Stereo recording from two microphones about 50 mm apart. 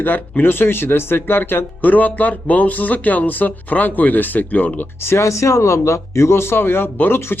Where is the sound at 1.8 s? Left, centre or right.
Left.